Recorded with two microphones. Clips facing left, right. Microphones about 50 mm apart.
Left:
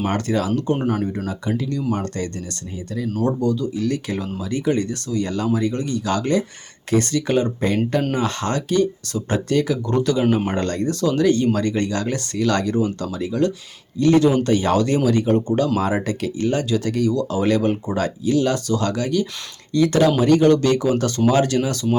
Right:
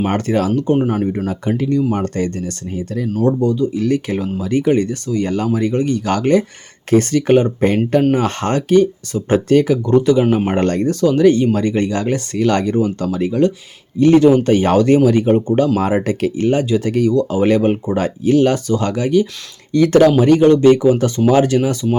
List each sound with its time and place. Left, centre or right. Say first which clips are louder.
0.0 s speech: right 5 dB; right
0.5 s speech: right 5 dB; centre
1.3 s speech: right 5 dB; right
1.7 s speech: right 7 dB; right
2.1 s speech: right 7 dB; right
3.1 s speech: right 5 dB; centre
3.4 s speech: right 5 dB; right
3.8 s speech: right 5 dB; right
10.0 s speech: right 6 dB; right
10.5 s speech: right 6 dB; right
20.1 s speech: right 4 dB; right